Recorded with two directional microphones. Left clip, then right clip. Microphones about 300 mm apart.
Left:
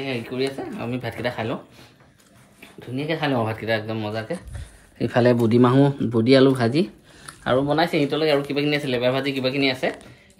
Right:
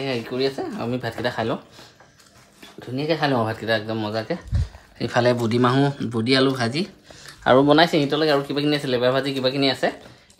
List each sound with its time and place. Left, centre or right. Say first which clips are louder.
0.0 s speech: right 2 dB; centre
2.8 s speech: right 3 dB; centre
4.9 s a man's voice: left 1 dB; centre
7.6 s speech: right 4 dB; right